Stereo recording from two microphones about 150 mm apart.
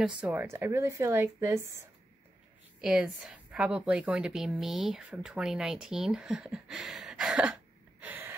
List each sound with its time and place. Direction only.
0.2 s speech: 15° right (ahead or behind)
2.8 s a woman's voice: 5° right (ahead or behind)
8.0 s gasp: 10° right (ahead or behind)